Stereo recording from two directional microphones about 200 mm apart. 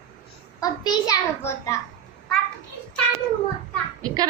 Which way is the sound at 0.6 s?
20° left (ahead or behind).